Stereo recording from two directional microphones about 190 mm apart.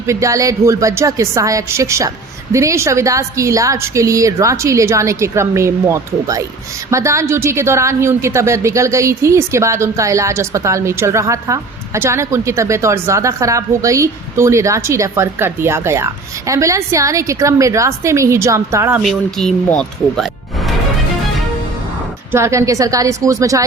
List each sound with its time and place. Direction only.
0.0 s a woman's voice: 15° right (ahead or behind)
19.4 s speech: 5° left (ahead or behind)
22.3 s a woman's voice: 15° right (ahead or behind)